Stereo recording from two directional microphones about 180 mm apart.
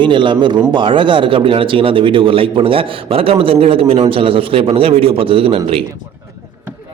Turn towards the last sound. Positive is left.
turn(degrees=-30)  # may be behind; listen again after turning